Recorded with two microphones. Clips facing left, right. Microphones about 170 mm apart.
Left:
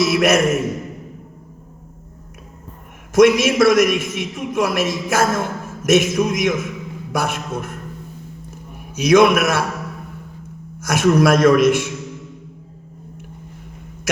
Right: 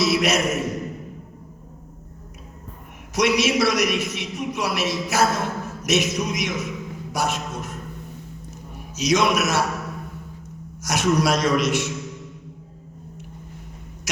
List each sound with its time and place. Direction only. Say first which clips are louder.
0.0 s a man's voice: left 5 dB; 50° left (ahead or behind)
3.2 s a man's voice: left 7 dB; 50° left (ahead or behind)
8.4 s a sound: left 2 dB; 55° left (ahead or behind)
10.8 s a man's voice: left 6 dB; 55° left (ahead or behind)